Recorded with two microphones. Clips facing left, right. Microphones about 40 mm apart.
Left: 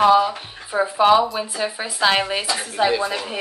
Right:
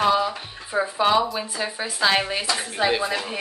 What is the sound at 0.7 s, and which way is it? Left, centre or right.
Speech, centre.